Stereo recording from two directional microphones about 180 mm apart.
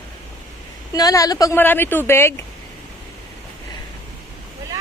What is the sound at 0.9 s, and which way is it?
Speech, 20° left (ahead or behind).